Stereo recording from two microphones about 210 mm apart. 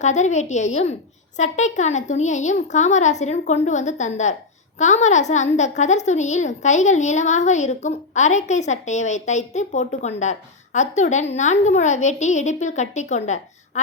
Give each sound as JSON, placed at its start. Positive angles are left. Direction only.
{"t": 0.0, "sound": "a woman's voice", "side_deg": 35}